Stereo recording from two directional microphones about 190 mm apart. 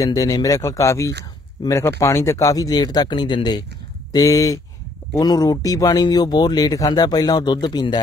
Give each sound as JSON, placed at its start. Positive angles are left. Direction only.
{"t": 0.0, "sound": "speech", "side_deg": 20}